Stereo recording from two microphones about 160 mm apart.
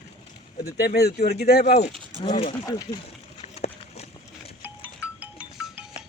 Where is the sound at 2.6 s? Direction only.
25° left (ahead or behind).